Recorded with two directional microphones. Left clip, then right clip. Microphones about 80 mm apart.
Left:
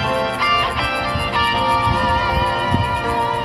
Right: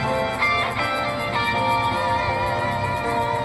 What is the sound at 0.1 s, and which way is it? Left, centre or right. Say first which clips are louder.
Music: left 3 dB; left.